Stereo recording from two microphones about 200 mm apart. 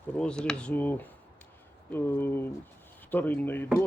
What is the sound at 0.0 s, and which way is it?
Speech, 5° left (ahead or behind).